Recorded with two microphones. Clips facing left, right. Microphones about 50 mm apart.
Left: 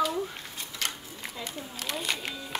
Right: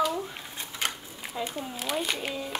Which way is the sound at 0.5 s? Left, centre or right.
Right.